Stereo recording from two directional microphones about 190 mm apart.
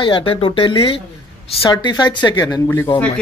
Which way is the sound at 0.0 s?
30° left (ahead or behind).